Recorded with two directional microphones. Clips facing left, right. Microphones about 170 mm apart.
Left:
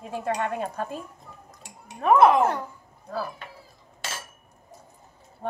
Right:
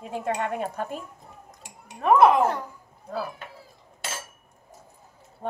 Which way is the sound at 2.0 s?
Centre (ahead or behind).